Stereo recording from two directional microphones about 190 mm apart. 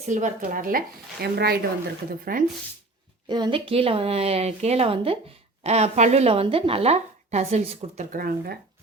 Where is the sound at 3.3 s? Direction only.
25° right (ahead or behind); by 8.6 s 50° right (ahead or behind).